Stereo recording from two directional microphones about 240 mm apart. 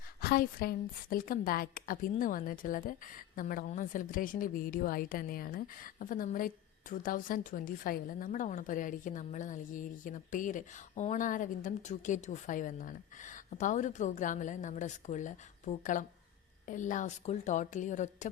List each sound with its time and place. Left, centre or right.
0.2 s a woman's voice: left